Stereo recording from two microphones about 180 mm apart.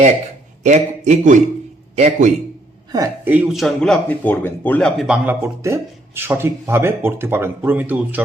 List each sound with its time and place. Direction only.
0.6 s a man's voice: 40° right (ahead or behind)
3.2 s speech: 5° right (ahead or behind); by 4.9 s 10° left (ahead or behind)
4.9 s speech: 5° right (ahead or behind)